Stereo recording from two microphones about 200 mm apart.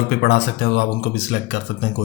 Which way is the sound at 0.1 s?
55° left (ahead or behind).